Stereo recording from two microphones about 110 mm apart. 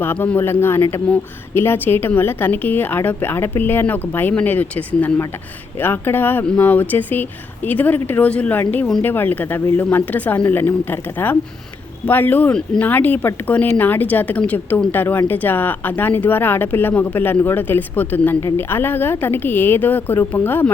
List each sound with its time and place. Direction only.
0.0 s speech: 20° left (ahead or behind)
12.0 s speech: 20° left (ahead or behind)